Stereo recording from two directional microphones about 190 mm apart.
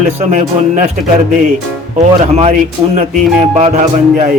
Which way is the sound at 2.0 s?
35° right (ahead or behind).